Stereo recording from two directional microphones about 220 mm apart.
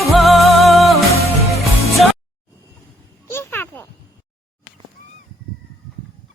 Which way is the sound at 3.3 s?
10° left (ahead or behind).